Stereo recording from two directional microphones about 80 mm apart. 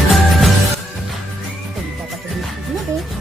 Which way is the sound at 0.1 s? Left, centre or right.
Centre.